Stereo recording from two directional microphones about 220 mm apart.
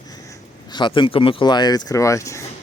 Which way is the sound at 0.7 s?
20° left (ahead or behind).